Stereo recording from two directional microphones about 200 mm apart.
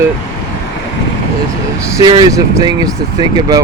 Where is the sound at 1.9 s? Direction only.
20° right (ahead or behind).